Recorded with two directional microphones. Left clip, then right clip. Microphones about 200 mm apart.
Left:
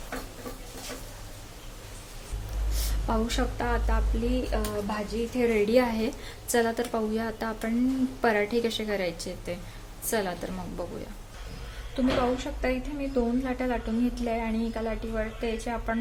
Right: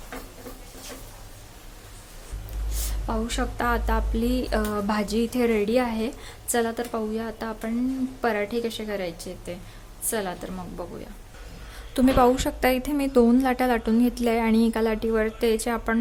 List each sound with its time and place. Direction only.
2.8 s speech: 10° right (ahead or behind)
11.9 s a woman's voice: 45° right (ahead or behind)